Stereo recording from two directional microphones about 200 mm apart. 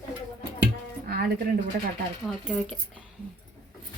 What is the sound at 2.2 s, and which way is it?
Speech, centre (ahead or behind).